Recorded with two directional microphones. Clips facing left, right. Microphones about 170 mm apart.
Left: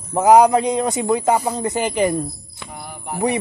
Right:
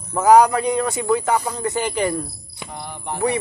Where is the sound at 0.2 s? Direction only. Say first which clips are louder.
Left 1 dB; 20° left (ahead or behind).